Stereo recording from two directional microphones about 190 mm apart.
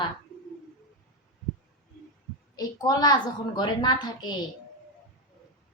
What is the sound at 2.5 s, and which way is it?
A woman's voice, 20° left (ahead or behind).